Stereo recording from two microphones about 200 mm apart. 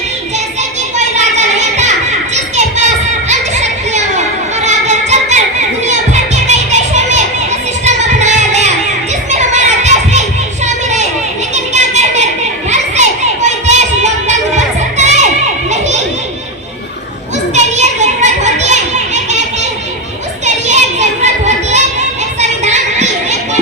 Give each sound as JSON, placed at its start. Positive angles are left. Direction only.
{"t": 0.9, "sound": "a sound", "side_deg": -35}
{"t": 2.3, "sound": "children playing", "side_deg": -35}
{"t": 3.2, "sound": "music", "side_deg": -35}
{"t": 7.9, "sound": "singing", "side_deg": -35}
{"t": 9.3, "sound": "children playing", "side_deg": -35}
{"t": 10.8, "sound": "a sound", "side_deg": -35}
{"t": 12.7, "sound": "music", "side_deg": -35}
{"t": 17.5, "sound": "children playing", "side_deg": -35}
{"t": 22.4, "sound": "a sound", "side_deg": -35}